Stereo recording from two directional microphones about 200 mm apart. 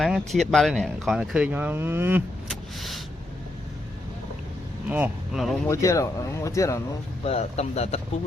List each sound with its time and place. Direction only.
0.0 s speech: centre (ahead or behind)
2.5 s vehicle: centre (ahead or behind)
4.9 s speech: 10° right (ahead or behind)
5.6 s speech: 15° left (ahead or behind)
7.3 s a man's voice: 35° left (ahead or behind)